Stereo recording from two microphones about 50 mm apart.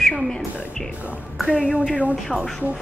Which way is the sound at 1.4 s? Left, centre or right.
Right.